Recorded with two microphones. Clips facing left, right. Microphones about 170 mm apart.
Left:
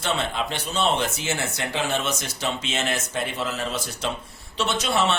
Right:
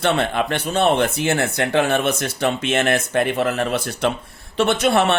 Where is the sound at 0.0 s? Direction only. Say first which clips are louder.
Right 7 dB; 60° right (ahead or behind).